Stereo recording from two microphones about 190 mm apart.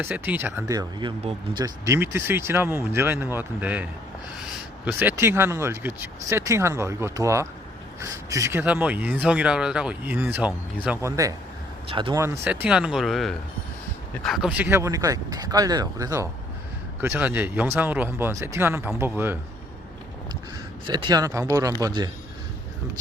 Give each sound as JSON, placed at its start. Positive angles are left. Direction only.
{"t": 0.0, "sound": "speech", "side_deg": -10}
{"t": 1.6, "sound": "speech", "side_deg": -15}
{"t": 4.9, "sound": "speech", "side_deg": -10}
{"t": 11.9, "sound": "speech", "side_deg": -25}
{"t": 12.2, "sound": "speech", "side_deg": -10}
{"t": 20.8, "sound": "speech", "side_deg": -25}